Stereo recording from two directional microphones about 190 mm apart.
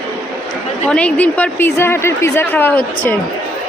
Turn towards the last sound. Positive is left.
turn(degrees=10)  # may be behind; listen again after turning